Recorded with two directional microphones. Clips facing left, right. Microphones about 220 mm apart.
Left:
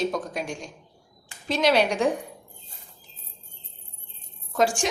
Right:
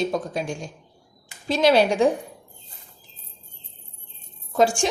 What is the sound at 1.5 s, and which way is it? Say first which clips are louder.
Speech: right 4 dB; 30° right (ahead or behind).